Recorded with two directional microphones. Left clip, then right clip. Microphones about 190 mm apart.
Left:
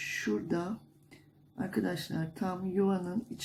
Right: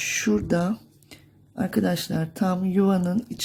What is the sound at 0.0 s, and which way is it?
Speech, 50° right (ahead or behind).